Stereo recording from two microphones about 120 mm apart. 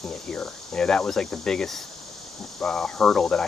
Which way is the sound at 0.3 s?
5° left (ahead or behind).